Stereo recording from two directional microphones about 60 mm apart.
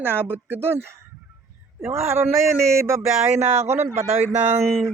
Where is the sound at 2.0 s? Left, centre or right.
Right.